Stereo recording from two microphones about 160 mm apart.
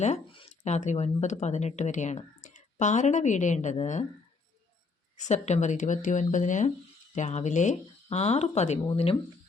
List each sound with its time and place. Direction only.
0.0 s speech: 40° left (ahead or behind)
5.1 s speech: 45° left (ahead or behind)